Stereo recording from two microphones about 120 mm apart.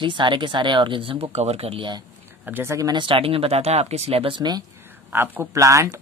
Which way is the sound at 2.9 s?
45° right (ahead or behind).